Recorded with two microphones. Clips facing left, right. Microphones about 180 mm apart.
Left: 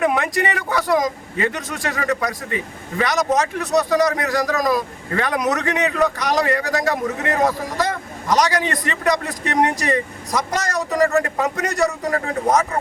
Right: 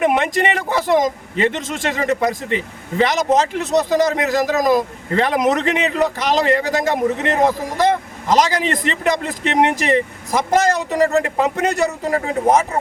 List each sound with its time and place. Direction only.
0.0 s a man's voice: 25° right (ahead or behind)